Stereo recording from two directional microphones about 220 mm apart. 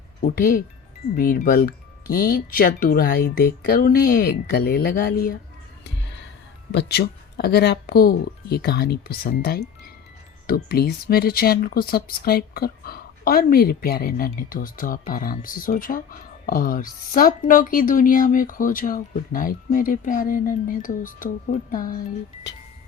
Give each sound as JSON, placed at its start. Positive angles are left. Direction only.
{"t": 0.2, "sound": "speech", "side_deg": 40}
{"t": 6.7, "sound": "speech", "side_deg": 50}